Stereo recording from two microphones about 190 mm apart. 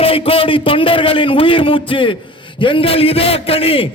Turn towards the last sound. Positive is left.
turn(degrees=30)  # may be behind; listen again after turning